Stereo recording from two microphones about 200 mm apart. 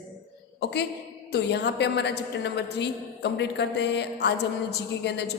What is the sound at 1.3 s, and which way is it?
A woman's voice, 60° left (ahead or behind).